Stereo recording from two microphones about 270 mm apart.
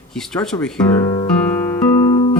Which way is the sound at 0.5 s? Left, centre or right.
Centre.